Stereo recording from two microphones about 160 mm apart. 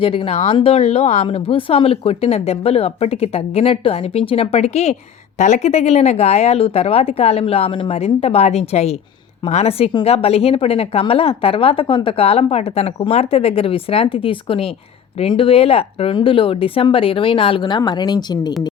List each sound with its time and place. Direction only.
0.0 s a woman's voice: 35° left (ahead or behind)